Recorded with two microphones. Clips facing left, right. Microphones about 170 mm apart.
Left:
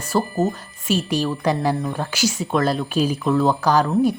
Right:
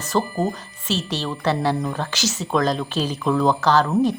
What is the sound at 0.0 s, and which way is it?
Speech, 10° left (ahead or behind).